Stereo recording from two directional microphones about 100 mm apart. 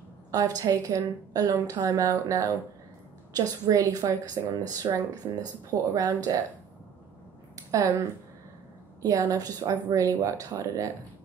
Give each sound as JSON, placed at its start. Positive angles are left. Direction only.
{"t": 0.3, "sound": "a woman's voice", "side_deg": -40}
{"t": 7.5, "sound": "a sound", "side_deg": -35}
{"t": 9.0, "sound": "a woman's voice", "side_deg": -35}